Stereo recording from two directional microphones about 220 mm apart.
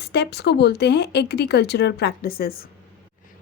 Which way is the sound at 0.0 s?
50° left (ahead or behind).